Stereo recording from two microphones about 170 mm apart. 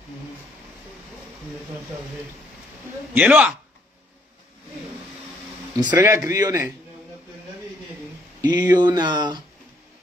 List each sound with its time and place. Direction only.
3.2 s a man's voice: 5° right (ahead or behind)
5.9 s a man's voice: 15° right (ahead or behind)
8.5 s speech: 25° right (ahead or behind)